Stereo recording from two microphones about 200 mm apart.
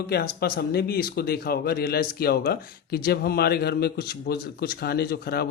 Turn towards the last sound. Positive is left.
turn(degrees=55)  # may be behind; listen again after turning